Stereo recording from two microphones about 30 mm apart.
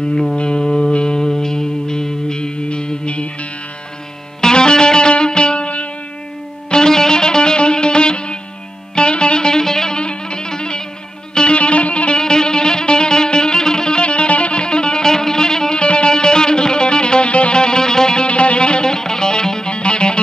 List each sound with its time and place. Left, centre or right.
0.4 s music: left
0.7 s music: centre; by 3.3 s left
4.4 s music: left
6.7 s music: left
9.9 s music: left
12.2 s music: left
15.8 s music: left
18.2 s music: left